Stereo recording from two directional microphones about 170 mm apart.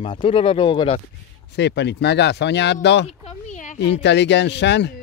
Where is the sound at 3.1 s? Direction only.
40° left (ahead or behind).